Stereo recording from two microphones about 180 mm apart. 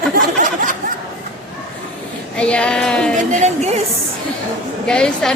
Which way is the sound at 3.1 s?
40° right (ahead or behind).